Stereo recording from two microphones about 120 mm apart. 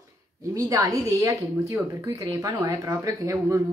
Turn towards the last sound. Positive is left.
turn(degrees=-25)  # may be behind; listen again after turning